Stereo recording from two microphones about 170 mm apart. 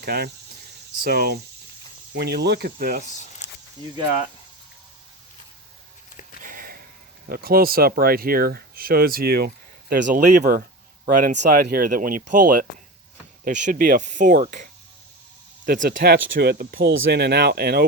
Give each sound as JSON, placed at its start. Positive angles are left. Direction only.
{"t": 0.0, "sound": "speech", "side_deg": -65}
{"t": 6.4, "sound": "sniff", "side_deg": -55}
{"t": 7.3, "sound": "speech", "side_deg": -60}
{"t": 10.1, "sound": "speech", "side_deg": -50}
{"t": 16.2, "sound": "speech", "side_deg": -80}